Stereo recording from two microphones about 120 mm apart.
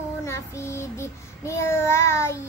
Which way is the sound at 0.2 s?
25° left (ahead or behind).